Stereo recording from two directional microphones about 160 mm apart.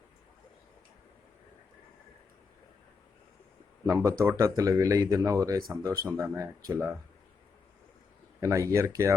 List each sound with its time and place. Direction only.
3.8 s speech: 15° right (ahead or behind)
8.4 s speech: 20° right (ahead or behind)